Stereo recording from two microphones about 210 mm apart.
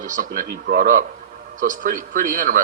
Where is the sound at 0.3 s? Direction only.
45° right (ahead or behind).